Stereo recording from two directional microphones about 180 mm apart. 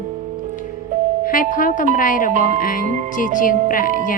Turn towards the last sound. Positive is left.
turn(degrees=50)  # may be behind; listen again after turning